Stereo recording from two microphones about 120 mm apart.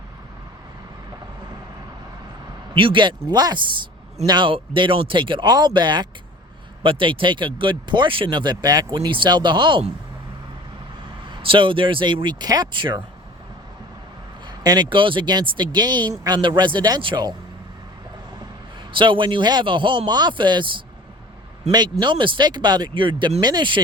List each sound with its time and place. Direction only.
2.7 s speech: 45° right (ahead or behind)
11.4 s speech: 45° right (ahead or behind)
14.4 s speech: 35° right (ahead or behind)
18.9 s speech: 45° right (ahead or behind)